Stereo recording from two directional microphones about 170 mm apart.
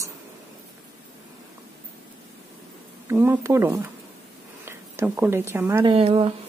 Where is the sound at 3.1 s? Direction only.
15° right (ahead or behind).